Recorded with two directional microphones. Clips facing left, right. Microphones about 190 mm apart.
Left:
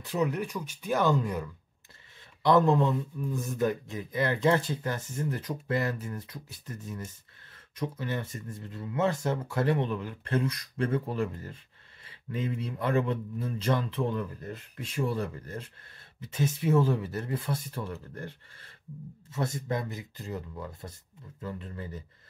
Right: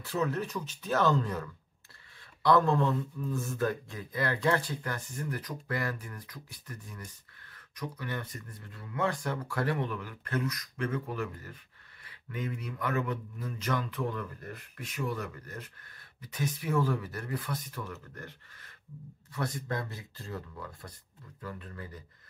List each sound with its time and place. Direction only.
0.0 s speech: 15° left (ahead or behind)